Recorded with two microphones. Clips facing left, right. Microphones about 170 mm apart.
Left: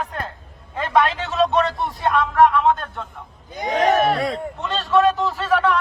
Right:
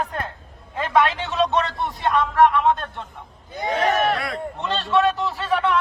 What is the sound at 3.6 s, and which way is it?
Speech, 40° left (ahead or behind).